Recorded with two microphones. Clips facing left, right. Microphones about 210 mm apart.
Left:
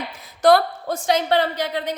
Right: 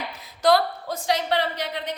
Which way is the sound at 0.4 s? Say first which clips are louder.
Left 4 dB; 50° left (ahead or behind).